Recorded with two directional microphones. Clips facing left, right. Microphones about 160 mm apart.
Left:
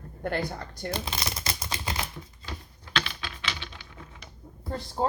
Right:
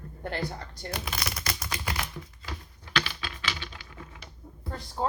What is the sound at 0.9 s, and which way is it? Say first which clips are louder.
Typewriter: even; 25° left (ahead or behind).